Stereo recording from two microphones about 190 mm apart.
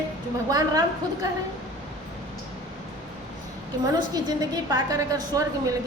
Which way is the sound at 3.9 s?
20° right (ahead or behind).